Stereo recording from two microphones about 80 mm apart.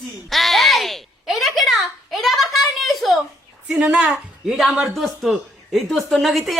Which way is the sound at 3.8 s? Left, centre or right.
Centre.